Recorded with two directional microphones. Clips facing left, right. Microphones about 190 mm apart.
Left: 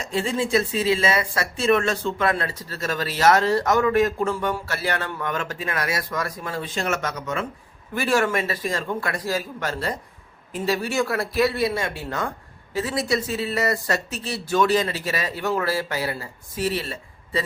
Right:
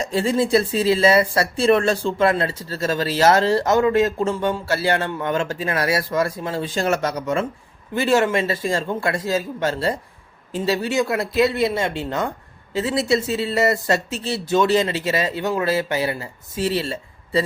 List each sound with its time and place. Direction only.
0.0 s speech: 35° right (ahead or behind)